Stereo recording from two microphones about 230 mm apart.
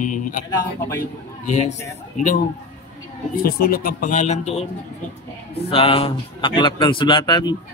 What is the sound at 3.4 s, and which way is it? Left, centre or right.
A man's voice, left.